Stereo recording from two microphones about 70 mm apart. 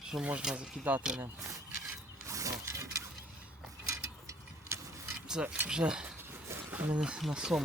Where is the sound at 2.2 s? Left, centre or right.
Right.